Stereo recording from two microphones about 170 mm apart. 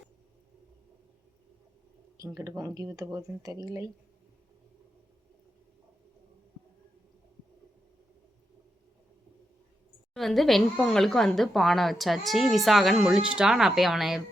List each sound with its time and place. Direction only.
2.1 s speech: 20° right (ahead or behind)
10.2 s a woman's voice: centre (ahead or behind)